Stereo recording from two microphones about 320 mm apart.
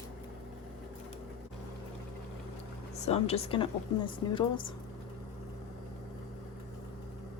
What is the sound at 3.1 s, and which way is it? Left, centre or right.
Speech, centre.